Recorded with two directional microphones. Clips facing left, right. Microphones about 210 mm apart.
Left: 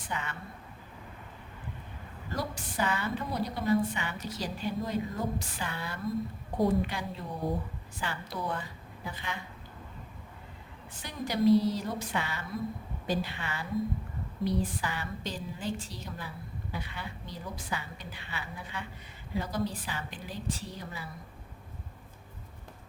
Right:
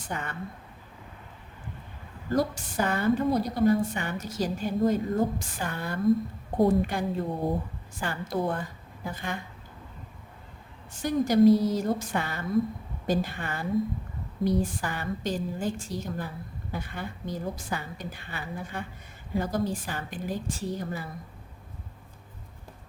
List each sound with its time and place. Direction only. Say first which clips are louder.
0.1 s a woman's voice: right 3 dB; 50° right (ahead or behind)
2.3 s a woman's voice: right 9 dB; 45° right (ahead or behind)
11.0 s a woman's voice: right 8 dB; 45° right (ahead or behind)